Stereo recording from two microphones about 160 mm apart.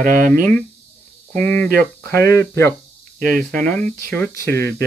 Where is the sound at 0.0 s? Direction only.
60° right (ahead or behind).